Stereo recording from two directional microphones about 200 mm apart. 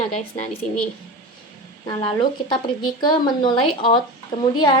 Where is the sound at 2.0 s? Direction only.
25° left (ahead or behind).